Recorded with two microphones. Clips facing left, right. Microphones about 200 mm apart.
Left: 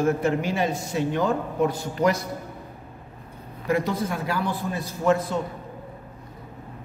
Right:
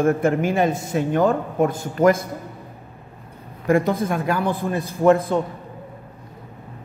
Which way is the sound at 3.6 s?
50° right (ahead or behind).